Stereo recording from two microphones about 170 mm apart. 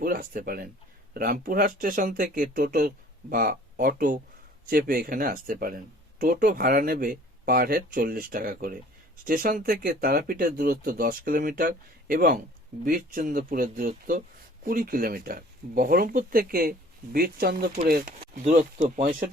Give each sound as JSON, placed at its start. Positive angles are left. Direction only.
{"t": 0.0, "sound": "speech", "side_deg": -60}
{"t": 18.4, "sound": "speech", "side_deg": -40}